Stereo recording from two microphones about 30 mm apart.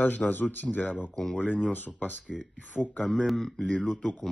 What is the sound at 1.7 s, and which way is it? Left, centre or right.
Speech, left.